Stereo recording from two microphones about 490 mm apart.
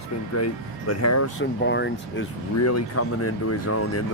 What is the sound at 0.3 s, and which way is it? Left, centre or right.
Speech, left.